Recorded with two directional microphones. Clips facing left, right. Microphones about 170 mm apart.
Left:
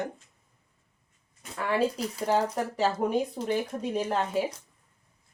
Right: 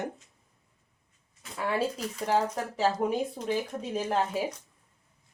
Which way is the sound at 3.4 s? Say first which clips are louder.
Left 2 dB; centre (ahead or behind).